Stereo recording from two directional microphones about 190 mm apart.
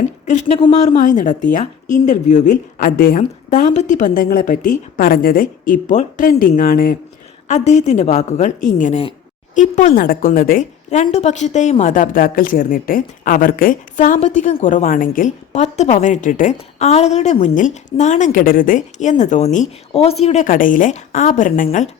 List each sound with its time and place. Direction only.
0.3 s a woman's voice: 35° left (ahead or behind)
7.4 s a woman's voice: 35° left (ahead or behind)